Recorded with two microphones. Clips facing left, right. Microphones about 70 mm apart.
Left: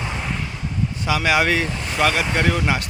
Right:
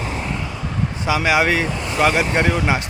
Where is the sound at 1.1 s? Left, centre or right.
Centre.